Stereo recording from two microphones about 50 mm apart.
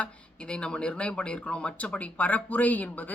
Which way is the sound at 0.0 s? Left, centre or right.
Centre.